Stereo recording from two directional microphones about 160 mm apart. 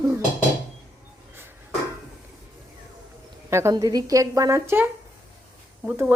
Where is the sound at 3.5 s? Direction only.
15° right (ahead or behind).